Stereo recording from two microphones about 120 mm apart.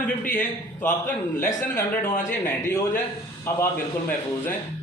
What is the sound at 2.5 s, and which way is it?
Speech, 20° left (ahead or behind).